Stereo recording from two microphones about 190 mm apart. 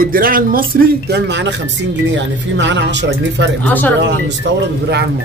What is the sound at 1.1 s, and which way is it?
Speech, 65° right (ahead or behind).